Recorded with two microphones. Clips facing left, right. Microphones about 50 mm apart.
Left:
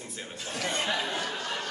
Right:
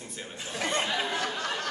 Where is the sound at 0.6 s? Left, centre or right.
Right.